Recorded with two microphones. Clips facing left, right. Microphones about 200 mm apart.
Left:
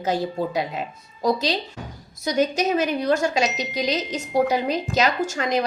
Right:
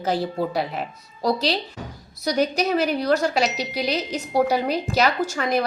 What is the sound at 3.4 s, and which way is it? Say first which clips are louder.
A woman's voice: even; 20° left (ahead or behind).